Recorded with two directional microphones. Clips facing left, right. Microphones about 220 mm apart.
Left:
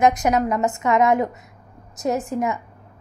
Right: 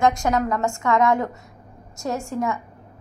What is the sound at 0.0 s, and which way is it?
A woman's voice, 20° left (ahead or behind).